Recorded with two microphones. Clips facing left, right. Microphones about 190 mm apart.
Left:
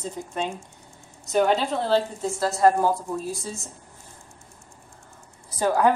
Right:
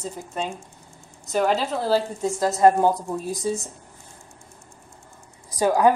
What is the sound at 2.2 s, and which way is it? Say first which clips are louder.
A woman's voice: right 4 dB; 20° right (ahead or behind).